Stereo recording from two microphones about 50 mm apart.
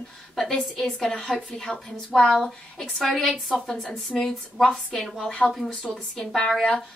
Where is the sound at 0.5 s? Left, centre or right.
Centre.